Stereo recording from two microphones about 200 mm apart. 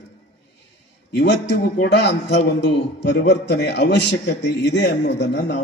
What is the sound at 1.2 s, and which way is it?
A man's voice, 60° left (ahead or behind).